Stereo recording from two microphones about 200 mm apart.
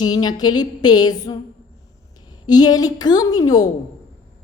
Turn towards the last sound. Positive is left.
turn(degrees=20)  # may be behind; listen again after turning